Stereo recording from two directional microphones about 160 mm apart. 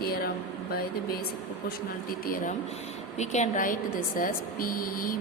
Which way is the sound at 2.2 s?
55° left (ahead or behind).